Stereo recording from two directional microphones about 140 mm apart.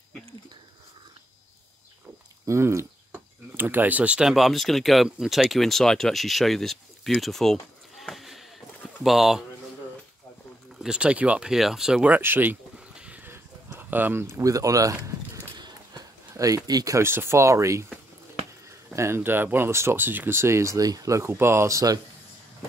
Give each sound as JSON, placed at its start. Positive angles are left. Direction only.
{"t": 2.4, "sound": "speech", "side_deg": -20}
{"t": 10.8, "sound": "speech", "side_deg": -5}
{"t": 18.9, "sound": "speech", "side_deg": -15}